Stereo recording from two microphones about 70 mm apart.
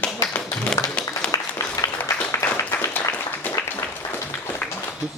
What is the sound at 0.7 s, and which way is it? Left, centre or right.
Music, centre.